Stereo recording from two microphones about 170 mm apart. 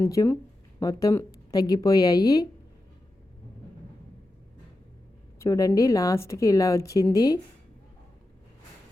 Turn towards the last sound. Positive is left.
turn(degrees=20)  # may be behind; listen again after turning